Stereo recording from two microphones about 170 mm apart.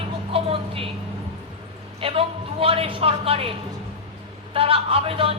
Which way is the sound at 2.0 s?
35° right (ahead or behind).